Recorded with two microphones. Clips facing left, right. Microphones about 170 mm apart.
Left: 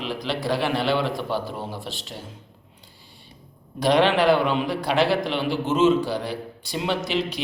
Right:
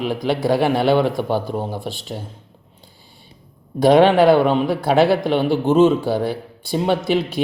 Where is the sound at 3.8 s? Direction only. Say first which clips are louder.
Right 7 dB; 50° right (ahead or behind).